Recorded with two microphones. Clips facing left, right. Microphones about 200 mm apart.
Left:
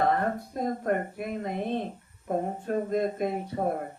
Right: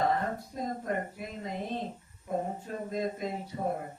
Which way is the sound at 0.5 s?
60° left (ahead or behind).